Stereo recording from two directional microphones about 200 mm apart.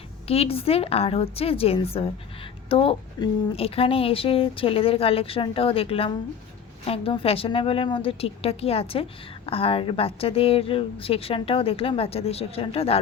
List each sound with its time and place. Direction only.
0.3 s a woman's voice: 30° left (ahead or behind)